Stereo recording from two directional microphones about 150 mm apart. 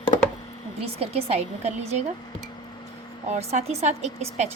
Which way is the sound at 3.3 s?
45° right (ahead or behind).